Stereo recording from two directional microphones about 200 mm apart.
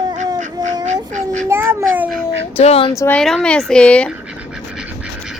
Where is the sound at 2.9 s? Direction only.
10° left (ahead or behind).